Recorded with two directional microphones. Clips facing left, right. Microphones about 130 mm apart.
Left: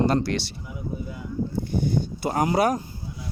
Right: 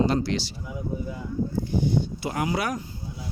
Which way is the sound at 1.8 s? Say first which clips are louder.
Even; 45° left (ahead or behind).